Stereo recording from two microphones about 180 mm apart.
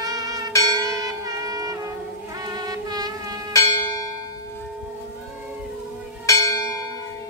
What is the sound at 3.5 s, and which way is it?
Church bell, 20° left (ahead or behind).